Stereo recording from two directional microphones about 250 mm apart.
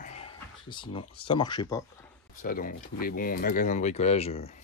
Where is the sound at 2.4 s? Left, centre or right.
Left.